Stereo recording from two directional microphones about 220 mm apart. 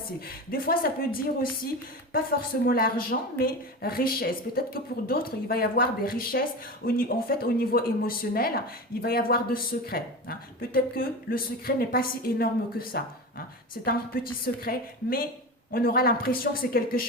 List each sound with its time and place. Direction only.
0.3 s speech: 40° left (ahead or behind)
2.6 s speech: 40° left (ahead or behind)